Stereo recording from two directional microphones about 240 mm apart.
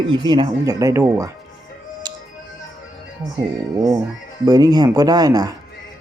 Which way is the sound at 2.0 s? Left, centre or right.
Centre.